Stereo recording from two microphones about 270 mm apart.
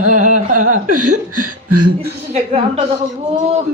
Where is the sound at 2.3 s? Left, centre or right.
Right.